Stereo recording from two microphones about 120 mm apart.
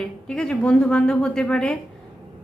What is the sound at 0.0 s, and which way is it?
A woman's voice, 5° left (ahead or behind).